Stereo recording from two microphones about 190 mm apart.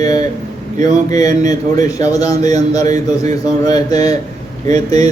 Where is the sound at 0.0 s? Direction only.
20° left (ahead or behind).